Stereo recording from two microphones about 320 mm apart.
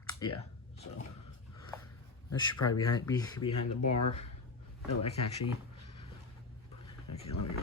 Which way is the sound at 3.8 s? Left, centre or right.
Left.